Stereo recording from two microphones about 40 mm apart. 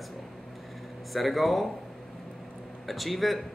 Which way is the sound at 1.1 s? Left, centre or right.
Centre.